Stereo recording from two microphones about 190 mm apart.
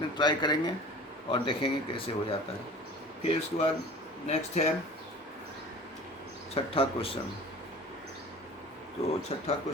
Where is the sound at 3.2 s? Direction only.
30° left (ahead or behind).